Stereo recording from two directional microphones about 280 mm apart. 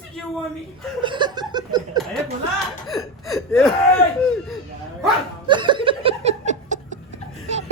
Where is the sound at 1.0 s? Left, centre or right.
Centre.